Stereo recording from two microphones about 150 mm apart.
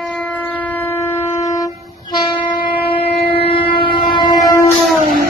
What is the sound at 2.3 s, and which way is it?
Wind instrument, 10° left (ahead or behind).